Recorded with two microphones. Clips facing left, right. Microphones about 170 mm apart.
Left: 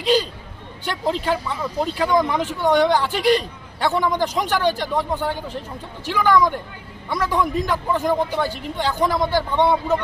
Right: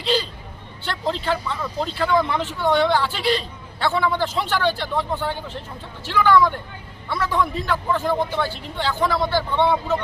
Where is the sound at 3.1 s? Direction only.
45° left (ahead or behind).